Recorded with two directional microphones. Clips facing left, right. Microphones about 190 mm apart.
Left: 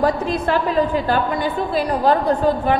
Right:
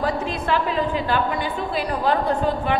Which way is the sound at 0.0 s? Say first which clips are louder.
Left 5 dB; 45° left (ahead or behind).